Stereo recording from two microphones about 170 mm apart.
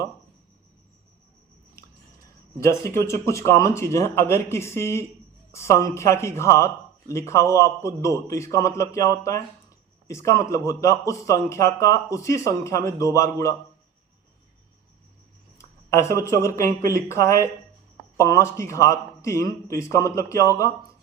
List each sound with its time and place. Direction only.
2.6 s a man's voice: 15° left (ahead or behind)
15.5 s a man's voice: 15° left (ahead or behind)